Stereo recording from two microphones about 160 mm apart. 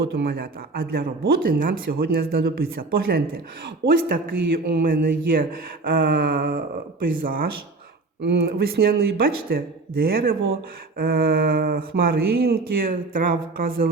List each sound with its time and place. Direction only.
0.0 s a man's voice: 75° right (ahead or behind)
8.2 s speech: 85° right; by 13.9 s 65° right (ahead or behind)